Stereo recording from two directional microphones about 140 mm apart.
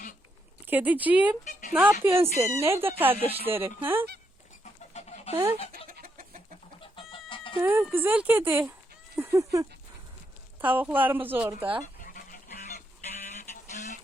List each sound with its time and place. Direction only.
0.7 s speech: 10° right (ahead or behind)
3.2 s speech: 45° right (ahead or behind)
3.5 s speech: 15° right (ahead or behind)
4.6 s chicken: 55° left (ahead or behind)
5.3 s speech: 20° right (ahead or behind)
5.7 s chicken: 90° right
6.7 s chicken: 40° left (ahead or behind)
7.5 s speech: 15° right (ahead or behind)
12.0 s goose: 75° left (ahead or behind)
13.2 s a sound: 60° left (ahead or behind)